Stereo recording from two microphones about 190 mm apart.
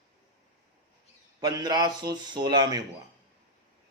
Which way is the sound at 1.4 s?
20° right (ahead or behind).